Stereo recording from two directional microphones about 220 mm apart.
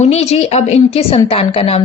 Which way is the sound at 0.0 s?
30° left (ahead or behind).